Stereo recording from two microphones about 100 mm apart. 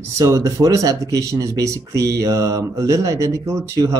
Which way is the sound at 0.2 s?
35° right (ahead or behind).